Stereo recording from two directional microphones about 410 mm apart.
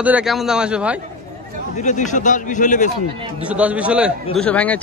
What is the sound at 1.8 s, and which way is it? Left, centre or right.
A man's voice, centre.